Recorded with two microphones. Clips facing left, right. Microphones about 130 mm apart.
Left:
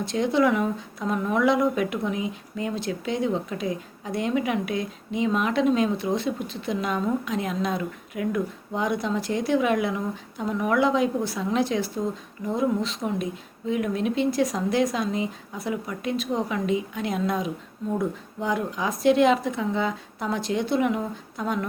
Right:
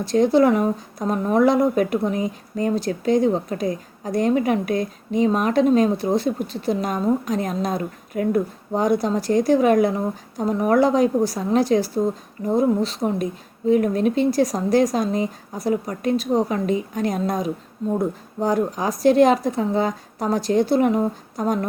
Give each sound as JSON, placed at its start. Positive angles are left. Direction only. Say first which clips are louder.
{"t": 0.0, "sound": "speech", "louder": "right 6 dB", "side_deg": -35}